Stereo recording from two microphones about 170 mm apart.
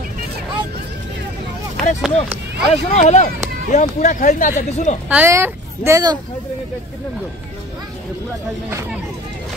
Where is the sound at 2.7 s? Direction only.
40° left (ahead or behind).